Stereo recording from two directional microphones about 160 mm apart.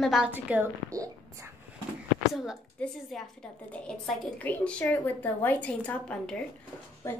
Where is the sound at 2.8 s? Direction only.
10° left (ahead or behind).